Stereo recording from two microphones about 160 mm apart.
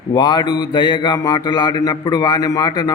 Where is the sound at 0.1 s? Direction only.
25° left (ahead or behind).